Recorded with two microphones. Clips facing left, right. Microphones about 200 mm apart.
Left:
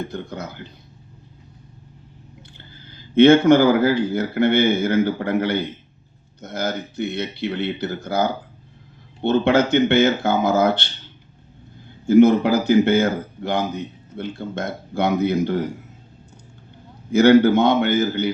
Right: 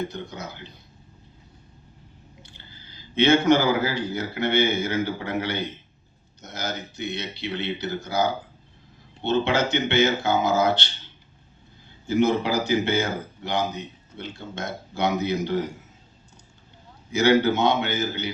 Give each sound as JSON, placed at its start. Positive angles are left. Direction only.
{"t": 0.0, "sound": "a man's voice", "side_deg": 55}
{"t": 2.5, "sound": "a man's voice", "side_deg": 55}
{"t": 12.0, "sound": "a man's voice", "side_deg": 55}
{"t": 17.1, "sound": "a man's voice", "side_deg": 55}